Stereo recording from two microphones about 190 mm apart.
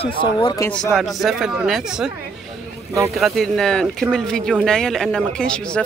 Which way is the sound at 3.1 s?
Centre (ahead or behind).